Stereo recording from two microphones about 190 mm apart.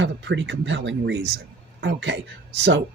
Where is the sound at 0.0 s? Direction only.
75° right (ahead or behind).